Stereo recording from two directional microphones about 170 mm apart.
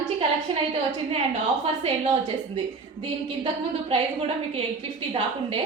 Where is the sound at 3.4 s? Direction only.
30° right (ahead or behind).